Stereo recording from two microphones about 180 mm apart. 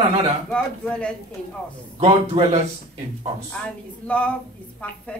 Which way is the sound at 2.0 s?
30° right (ahead or behind).